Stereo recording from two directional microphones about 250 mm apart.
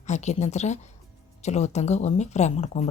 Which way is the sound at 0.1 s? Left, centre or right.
Left.